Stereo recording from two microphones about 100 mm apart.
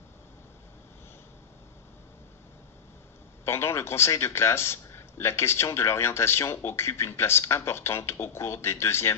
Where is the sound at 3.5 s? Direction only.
25° left (ahead or behind).